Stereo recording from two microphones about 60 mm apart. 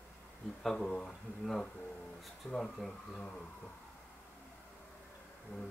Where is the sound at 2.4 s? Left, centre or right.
Left.